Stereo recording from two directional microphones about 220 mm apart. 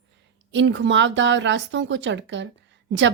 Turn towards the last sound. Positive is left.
turn(degrees=-55)  # may be behind; listen again after turning